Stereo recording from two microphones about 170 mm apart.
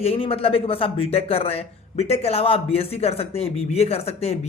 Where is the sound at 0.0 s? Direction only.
35° left (ahead or behind).